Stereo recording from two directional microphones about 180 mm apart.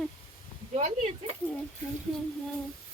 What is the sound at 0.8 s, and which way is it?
Speech, 40° right (ahead or behind).